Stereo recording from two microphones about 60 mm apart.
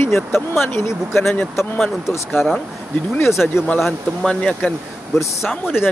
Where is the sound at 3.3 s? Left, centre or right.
Centre.